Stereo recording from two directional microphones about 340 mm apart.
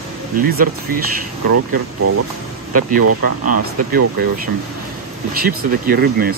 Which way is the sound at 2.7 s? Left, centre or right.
Right.